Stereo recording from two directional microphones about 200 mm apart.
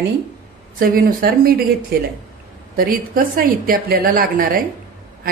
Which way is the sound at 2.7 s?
45° right (ahead or behind).